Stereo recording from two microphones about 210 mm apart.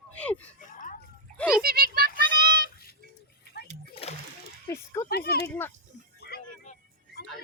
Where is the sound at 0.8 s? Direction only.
40° left (ahead or behind).